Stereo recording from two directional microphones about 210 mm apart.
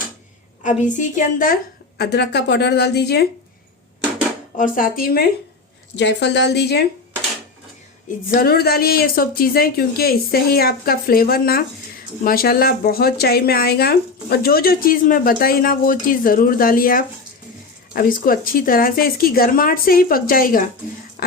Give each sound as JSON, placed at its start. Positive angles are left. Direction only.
{"t": 0.6, "sound": "a woman's voice", "side_deg": 35}
{"t": 2.0, "sound": "speech", "side_deg": 50}
{"t": 4.5, "sound": "a woman's voice", "side_deg": 40}
{"t": 6.0, "sound": "a woman's voice", "side_deg": 55}
{"t": 8.3, "sound": "speech", "side_deg": 45}